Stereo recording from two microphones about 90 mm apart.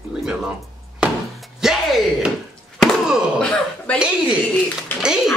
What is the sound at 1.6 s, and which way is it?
Music, 5° right (ahead or behind).